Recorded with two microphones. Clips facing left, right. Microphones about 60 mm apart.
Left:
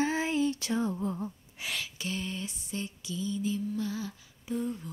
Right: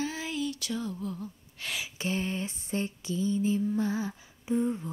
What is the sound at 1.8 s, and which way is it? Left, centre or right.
Female singing, right.